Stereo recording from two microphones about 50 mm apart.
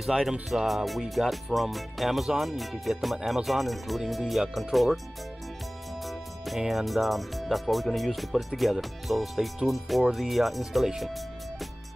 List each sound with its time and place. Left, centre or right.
0.1 s speech: centre
0.7 s speech: centre
6.0 s music: centre
6.7 s speech: centre